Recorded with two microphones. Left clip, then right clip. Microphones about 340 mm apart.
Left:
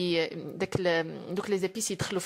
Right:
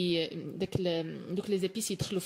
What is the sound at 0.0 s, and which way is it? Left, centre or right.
Speech, centre.